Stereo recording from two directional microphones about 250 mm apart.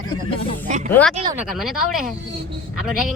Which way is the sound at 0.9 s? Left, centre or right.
Centre.